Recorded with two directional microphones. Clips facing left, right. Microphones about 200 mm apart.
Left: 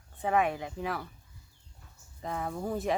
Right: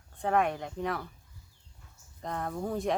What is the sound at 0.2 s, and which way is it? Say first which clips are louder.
Speech: even; 5° left (ahead or behind).